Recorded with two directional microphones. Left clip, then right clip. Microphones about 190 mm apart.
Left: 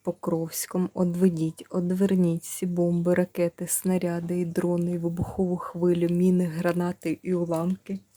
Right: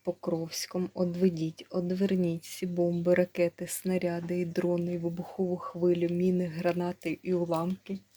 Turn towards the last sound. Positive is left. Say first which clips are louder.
# left 3 dB
turn(degrees=30)  # may be behind; listen again after turning